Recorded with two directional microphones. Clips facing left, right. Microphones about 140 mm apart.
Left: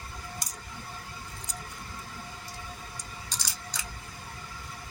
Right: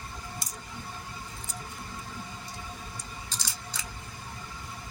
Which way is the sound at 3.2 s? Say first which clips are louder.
Even; 15° left (ahead or behind).